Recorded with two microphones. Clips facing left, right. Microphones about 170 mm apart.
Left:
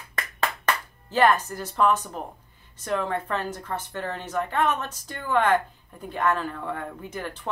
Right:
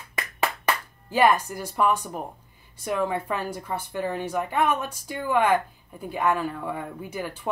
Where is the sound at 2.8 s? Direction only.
10° right (ahead or behind).